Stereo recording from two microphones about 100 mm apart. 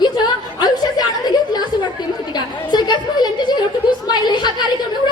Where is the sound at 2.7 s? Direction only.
45° left (ahead or behind).